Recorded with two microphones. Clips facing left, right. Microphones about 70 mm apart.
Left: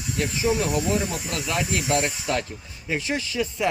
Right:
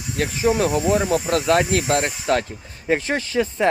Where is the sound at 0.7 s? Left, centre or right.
Right.